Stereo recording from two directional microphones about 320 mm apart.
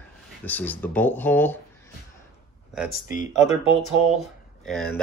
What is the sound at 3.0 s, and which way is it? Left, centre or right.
Speech, left.